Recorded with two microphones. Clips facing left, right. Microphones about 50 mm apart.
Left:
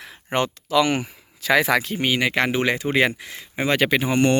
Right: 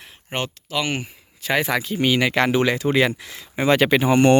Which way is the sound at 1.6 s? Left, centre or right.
Left.